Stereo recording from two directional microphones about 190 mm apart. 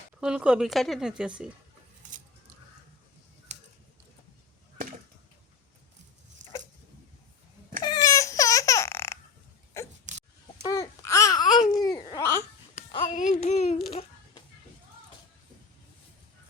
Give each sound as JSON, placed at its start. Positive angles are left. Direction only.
{"t": 0.2, "sound": "a woman's voice", "side_deg": -5}
{"t": 7.8, "sound": "crying", "side_deg": 20}
{"t": 9.7, "sound": "a sound", "side_deg": 15}
{"t": 10.7, "sound": "babbling", "side_deg": 15}
{"t": 12.9, "sound": "music", "side_deg": 25}
{"t": 13.1, "sound": "a sound", "side_deg": 40}